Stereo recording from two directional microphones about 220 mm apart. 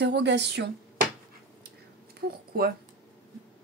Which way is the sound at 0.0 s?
50° right (ahead or behind).